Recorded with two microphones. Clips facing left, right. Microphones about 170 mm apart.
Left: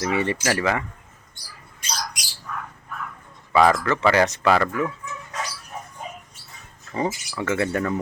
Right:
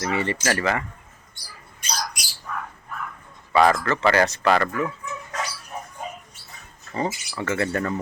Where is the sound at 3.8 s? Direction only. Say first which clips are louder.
Left 1 dB; 15° left (ahead or behind).